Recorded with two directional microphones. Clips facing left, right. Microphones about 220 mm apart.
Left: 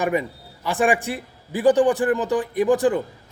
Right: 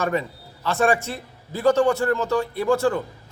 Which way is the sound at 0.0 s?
15° left (ahead or behind).